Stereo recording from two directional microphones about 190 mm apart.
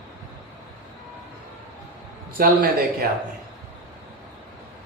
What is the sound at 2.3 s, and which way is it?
Speech, 50° right (ahead or behind).